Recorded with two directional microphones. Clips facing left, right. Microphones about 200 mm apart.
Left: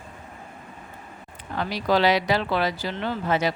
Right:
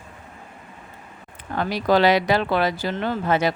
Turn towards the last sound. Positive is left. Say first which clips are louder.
# right 3 dB
turn(degrees=-55)  # may be behind; listen again after turning